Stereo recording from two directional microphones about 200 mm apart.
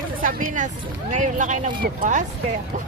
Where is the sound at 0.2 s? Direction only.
45° right (ahead or behind).